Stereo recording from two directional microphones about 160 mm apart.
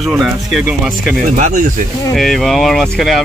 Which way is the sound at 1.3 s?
50° right (ahead or behind).